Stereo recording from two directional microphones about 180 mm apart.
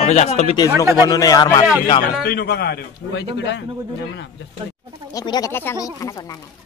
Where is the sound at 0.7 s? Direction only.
15° right (ahead or behind).